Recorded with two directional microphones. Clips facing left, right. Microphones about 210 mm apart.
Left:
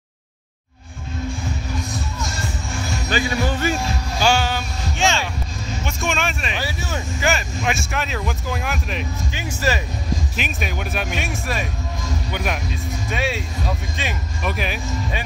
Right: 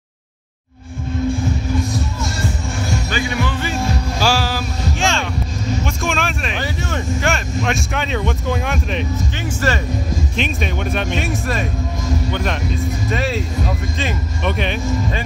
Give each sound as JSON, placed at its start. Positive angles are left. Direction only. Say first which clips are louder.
{"t": 3.1, "sound": "speech", "louder": "left 4 dB", "side_deg": 40}
{"t": 4.2, "sound": "a sound", "louder": "left 1 dB", "side_deg": 0}
{"t": 5.9, "sound": "speech", "louder": "right 2 dB", "side_deg": 0}